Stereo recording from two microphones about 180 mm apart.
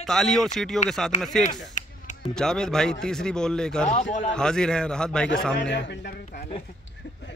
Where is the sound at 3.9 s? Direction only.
40° left (ahead or behind).